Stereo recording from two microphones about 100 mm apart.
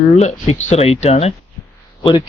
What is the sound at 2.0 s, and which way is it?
Speech, 55° left (ahead or behind).